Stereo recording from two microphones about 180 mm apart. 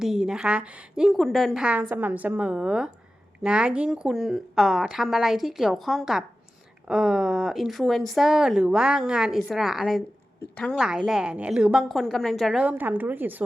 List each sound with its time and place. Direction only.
0.0 s a woman's voice: 5° right (ahead or behind)